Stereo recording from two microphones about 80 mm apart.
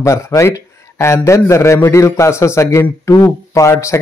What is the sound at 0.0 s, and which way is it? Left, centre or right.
A man's voice, left.